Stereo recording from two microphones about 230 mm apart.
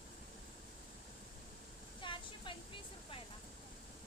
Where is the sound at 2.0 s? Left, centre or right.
Left.